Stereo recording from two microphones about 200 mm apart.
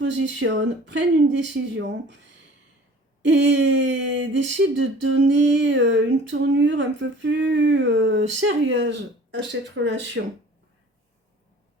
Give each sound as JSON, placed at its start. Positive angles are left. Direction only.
{"t": 0.0, "sound": "speech", "side_deg": -65}
{"t": 3.2, "sound": "speech", "side_deg": -65}